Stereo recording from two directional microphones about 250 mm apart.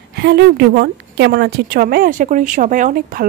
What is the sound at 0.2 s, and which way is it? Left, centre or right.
A woman's voice, right.